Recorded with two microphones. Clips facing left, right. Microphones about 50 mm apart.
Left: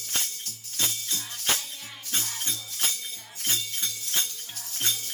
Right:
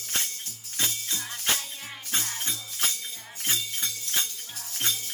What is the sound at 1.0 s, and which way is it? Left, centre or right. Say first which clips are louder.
Music: even; centre.